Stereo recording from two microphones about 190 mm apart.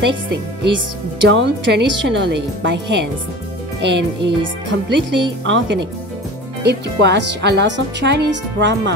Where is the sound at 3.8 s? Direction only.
65° right (ahead or behind).